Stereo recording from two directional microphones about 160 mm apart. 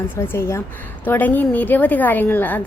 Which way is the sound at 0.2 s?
15° left (ahead or behind).